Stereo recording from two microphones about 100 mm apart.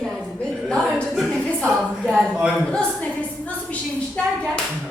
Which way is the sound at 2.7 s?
10° left (ahead or behind).